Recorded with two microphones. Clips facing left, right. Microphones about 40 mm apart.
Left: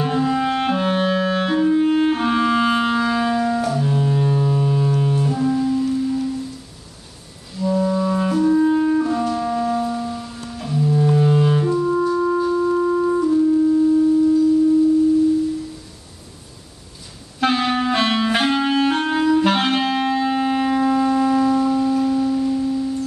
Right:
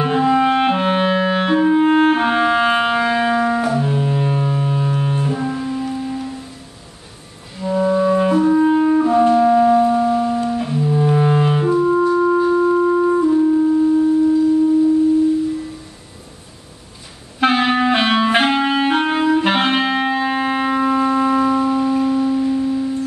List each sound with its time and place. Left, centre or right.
0.0 s clarinet: right
7.5 s clarinet: right
9.2 s music: right
17.4 s clarinet: right